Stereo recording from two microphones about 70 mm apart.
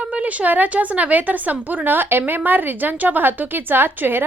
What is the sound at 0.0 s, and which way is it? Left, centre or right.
A woman's voice, centre.